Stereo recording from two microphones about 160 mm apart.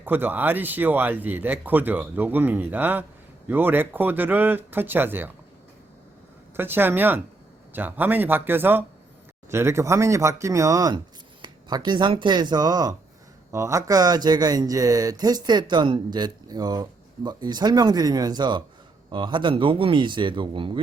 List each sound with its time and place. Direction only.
0.0 s speech: 10° right (ahead or behind)
6.6 s a man's voice: 15° right (ahead or behind); by 20.8 s 30° right (ahead or behind)